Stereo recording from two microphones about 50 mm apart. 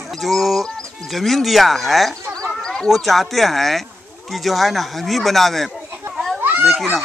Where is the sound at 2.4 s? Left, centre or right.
Centre.